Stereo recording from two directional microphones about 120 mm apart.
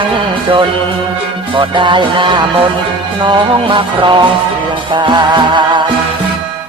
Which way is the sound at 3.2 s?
40° right (ahead or behind).